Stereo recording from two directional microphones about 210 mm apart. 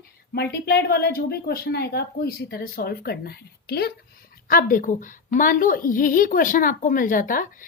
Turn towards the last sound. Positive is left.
turn(degrees=40)  # may be behind; listen again after turning